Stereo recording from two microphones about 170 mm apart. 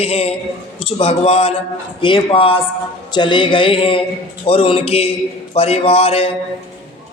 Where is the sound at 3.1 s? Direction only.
25° left (ahead or behind).